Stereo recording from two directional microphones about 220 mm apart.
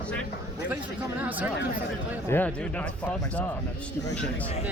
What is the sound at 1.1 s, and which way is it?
Speech, 5° right (ahead or behind).